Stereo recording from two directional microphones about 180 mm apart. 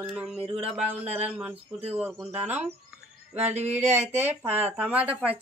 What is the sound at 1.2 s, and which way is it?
Speech, 10° right (ahead or behind).